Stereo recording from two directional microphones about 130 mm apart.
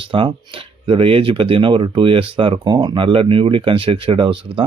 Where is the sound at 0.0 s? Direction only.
40° right (ahead or behind).